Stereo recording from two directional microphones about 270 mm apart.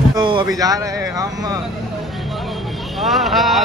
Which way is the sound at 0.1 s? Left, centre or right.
Centre.